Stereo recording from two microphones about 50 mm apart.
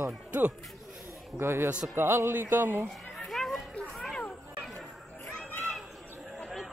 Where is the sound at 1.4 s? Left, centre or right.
Right.